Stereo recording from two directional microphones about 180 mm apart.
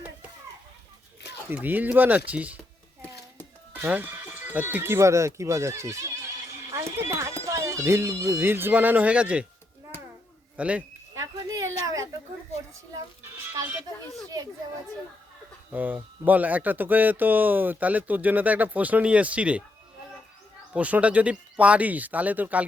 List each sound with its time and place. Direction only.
1.5 s speech: 10° right (ahead or behind)
3.8 s speech: 10° right (ahead or behind)
10.6 s speech: 5° right (ahead or behind)
11.1 s a sound: 20° right (ahead or behind)
15.7 s speech: 10° right (ahead or behind)
20.7 s speech: 5° right (ahead or behind)